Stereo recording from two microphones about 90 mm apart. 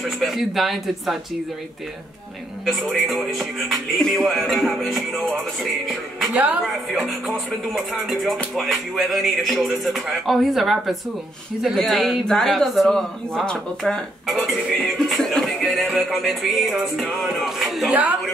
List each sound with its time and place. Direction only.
0.0 s speech: centre (ahead or behind)
2.6 s speech: centre (ahead or behind)
6.3 s a woman's voice: 15° right (ahead or behind)
6.9 s speech: 5° right (ahead or behind)
14.2 s speech: 5° right (ahead or behind)